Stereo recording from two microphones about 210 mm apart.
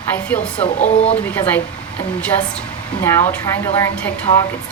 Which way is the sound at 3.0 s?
10° left (ahead or behind).